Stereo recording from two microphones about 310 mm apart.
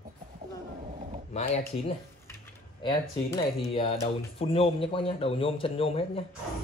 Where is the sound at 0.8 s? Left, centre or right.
Right.